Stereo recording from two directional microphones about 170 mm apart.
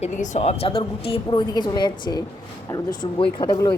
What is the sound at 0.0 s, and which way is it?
A woman's voice, 40° left (ahead or behind).